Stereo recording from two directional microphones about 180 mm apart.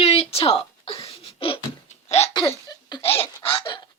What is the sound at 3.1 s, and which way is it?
Speech, 30° left (ahead or behind).